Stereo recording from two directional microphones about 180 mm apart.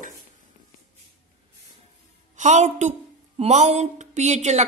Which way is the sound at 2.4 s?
45° right (ahead or behind).